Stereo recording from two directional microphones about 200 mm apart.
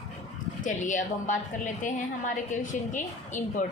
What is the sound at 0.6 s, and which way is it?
A woman's voice, 40° left (ahead or behind).